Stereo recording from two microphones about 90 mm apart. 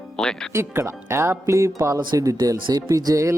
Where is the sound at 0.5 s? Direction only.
30° right (ahead or behind).